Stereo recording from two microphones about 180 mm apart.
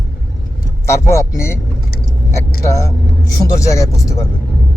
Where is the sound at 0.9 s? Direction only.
15° left (ahead or behind).